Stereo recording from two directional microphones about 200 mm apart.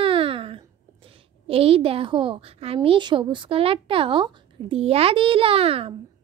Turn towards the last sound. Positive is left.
turn(degrees=-30)  # may be behind; listen again after turning